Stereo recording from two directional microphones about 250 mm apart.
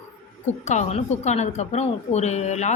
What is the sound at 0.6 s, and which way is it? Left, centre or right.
Speech, left.